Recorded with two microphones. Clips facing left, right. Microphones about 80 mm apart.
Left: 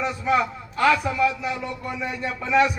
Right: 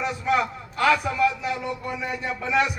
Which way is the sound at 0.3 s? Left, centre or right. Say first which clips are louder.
Left 2 dB; centre.